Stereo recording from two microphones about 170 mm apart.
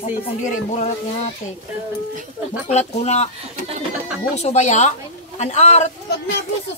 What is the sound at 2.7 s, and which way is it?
Speech, 40° left (ahead or behind).